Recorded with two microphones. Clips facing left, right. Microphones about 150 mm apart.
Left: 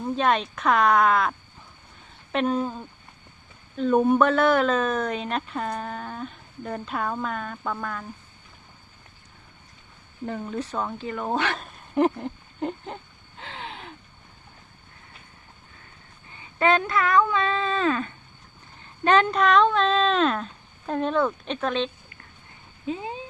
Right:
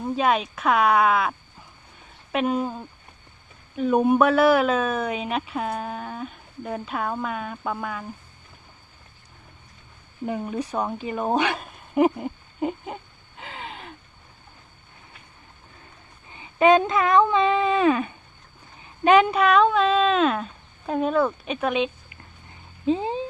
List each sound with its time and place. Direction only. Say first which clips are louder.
0.0 s a man's voice: right 1 dB; 5° right (ahead or behind)
10.2 s a sound: right 3 dB; 15° right (ahead or behind)
16.4 s a man's voice: right 5 dB; 20° right (ahead or behind)
22.9 s speech: right 8 dB; 30° right (ahead or behind)